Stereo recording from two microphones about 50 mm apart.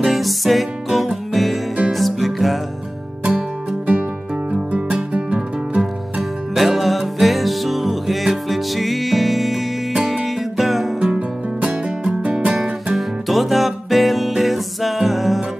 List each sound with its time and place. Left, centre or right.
0.0 s music: centre
3.3 s music: right
6.5 s music: centre
11.0 s music: centre
12.9 s music: centre